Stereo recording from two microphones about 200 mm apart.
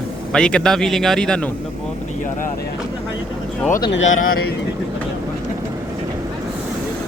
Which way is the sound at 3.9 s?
70° left (ahead or behind).